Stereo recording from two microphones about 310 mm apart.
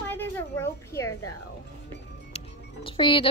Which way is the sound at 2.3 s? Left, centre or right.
Centre.